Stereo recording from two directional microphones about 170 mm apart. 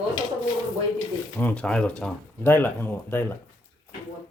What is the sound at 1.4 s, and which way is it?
Speech, 10° left (ahead or behind).